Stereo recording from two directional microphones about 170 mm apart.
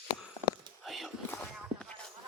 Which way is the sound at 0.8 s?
Centre (ahead or behind).